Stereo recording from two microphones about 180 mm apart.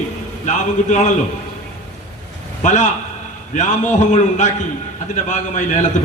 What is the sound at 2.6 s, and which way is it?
A man's voice, 40° left (ahead or behind).